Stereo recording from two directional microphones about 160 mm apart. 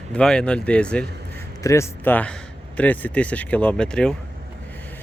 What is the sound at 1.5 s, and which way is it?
Speech, 20° left (ahead or behind).